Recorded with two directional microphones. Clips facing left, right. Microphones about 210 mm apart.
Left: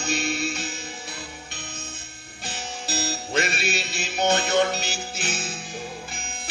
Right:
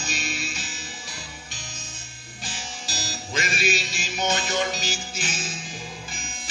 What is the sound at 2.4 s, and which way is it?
Music, 60° left (ahead or behind).